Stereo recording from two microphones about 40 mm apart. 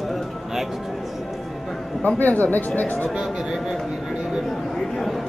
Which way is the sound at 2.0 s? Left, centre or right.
Left.